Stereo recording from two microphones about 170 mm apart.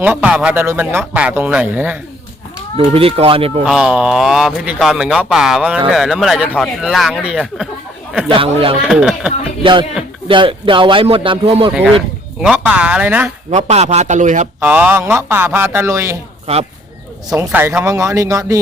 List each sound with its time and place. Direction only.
0.0 s speech: 10° right (ahead or behind)
2.7 s speech: 35° right (ahead or behind)
3.6 s speech: 5° right (ahead or behind)
8.3 s speech: 30° right (ahead or behind)
8.9 s speech: 5° right (ahead or behind)
9.6 s speech: 30° right (ahead or behind)
12.4 s speech: 5° right (ahead or behind)
13.5 s speech: 40° right (ahead or behind)
14.6 s speech: 10° right (ahead or behind)
17.2 s speech: 20° right (ahead or behind)
17.5 s speech: 10° right (ahead or behind)